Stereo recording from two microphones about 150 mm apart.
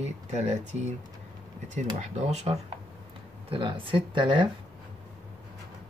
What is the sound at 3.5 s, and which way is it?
Speech, 35° right (ahead or behind).